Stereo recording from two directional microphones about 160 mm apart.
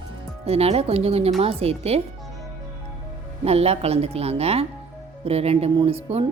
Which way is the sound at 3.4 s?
40° right (ahead or behind).